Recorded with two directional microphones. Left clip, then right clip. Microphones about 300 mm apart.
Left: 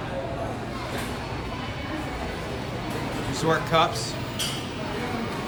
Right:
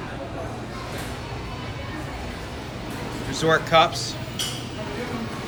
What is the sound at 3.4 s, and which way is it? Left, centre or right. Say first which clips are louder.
Speech: right 4 dB; centre.